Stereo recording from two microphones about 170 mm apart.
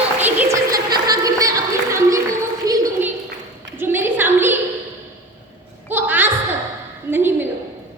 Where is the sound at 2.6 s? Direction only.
20° right (ahead or behind).